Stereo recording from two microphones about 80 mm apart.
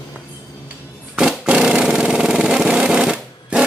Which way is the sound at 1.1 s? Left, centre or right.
Centre.